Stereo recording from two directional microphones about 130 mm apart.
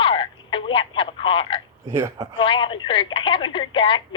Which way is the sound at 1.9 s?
20° right (ahead or behind).